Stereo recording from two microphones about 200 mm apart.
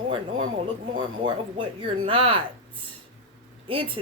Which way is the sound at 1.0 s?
25° right (ahead or behind).